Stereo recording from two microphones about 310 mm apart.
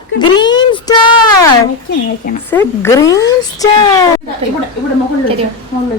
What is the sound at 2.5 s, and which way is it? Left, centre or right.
Speech, centre.